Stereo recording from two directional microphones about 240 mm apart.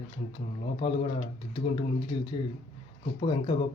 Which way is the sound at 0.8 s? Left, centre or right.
Left.